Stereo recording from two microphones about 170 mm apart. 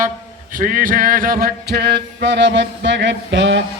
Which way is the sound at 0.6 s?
55° right (ahead or behind).